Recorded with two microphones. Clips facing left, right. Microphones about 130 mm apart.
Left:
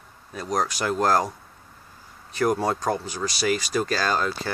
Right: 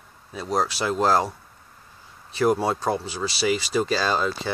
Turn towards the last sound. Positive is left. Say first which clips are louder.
# right 1 dB
turn(degrees=-5)  # may be behind; listen again after turning